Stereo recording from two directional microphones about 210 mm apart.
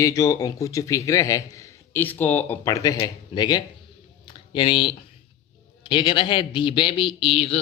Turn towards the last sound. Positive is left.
turn(degrees=30)  # may be behind; listen again after turning